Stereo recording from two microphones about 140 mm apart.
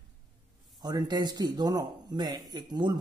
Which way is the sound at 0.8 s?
30° right (ahead or behind).